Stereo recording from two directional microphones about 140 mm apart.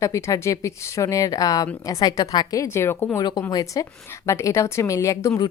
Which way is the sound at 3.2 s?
30° left (ahead or behind).